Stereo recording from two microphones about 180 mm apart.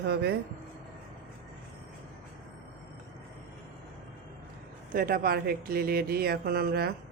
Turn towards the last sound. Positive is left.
turn(degrees=-60)  # may be behind; listen again after turning